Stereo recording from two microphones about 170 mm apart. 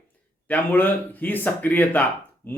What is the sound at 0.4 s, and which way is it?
A man's voice, 10° left (ahead or behind).